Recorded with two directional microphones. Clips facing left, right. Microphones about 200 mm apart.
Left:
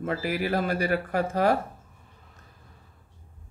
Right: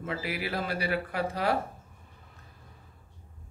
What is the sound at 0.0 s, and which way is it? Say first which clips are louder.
Speech: left 6 dB; 45° left (ahead or behind).